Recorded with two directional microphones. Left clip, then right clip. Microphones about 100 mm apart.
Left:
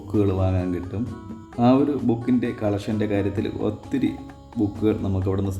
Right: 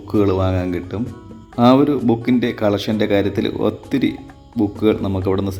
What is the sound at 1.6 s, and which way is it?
Speech, 30° right (ahead or behind).